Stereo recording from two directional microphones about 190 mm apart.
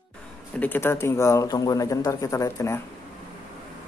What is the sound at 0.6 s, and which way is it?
Speech, 10° left (ahead or behind).